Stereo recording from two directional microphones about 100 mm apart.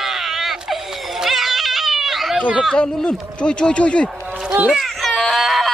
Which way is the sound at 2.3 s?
15° right (ahead or behind).